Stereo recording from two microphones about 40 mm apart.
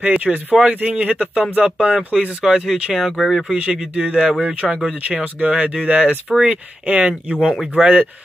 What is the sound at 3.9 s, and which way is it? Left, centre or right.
Speech, right.